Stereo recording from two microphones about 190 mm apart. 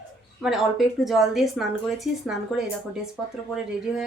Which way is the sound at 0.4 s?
Centre (ahead or behind).